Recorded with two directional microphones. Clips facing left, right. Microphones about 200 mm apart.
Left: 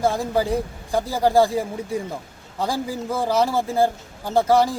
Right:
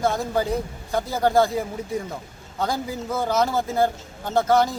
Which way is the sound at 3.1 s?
10° left (ahead or behind).